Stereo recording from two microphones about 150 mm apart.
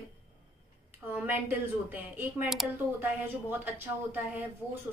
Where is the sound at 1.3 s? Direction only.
15° right (ahead or behind).